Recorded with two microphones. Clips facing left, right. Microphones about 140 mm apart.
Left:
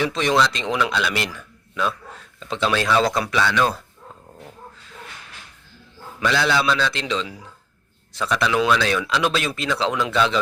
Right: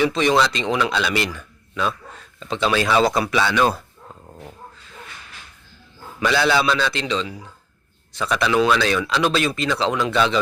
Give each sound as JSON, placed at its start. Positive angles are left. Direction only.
{"t": 0.0, "sound": "speech", "side_deg": 0}
{"t": 6.1, "sound": "speech", "side_deg": -5}